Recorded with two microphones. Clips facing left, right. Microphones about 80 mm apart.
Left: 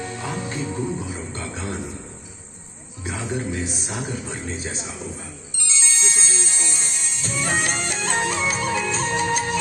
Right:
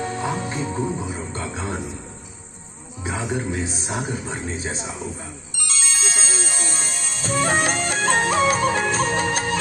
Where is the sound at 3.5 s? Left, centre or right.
Right.